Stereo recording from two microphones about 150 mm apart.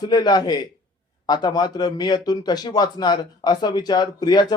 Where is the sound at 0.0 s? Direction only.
25° left (ahead or behind).